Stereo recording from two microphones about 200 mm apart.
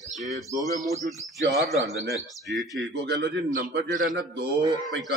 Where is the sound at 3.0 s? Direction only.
60° right (ahead or behind).